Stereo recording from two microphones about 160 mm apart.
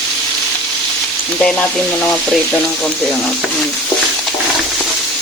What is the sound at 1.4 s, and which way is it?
Frying, 10° left (ahead or behind).